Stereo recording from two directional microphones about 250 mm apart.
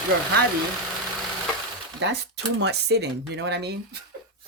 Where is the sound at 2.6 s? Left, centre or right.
Right.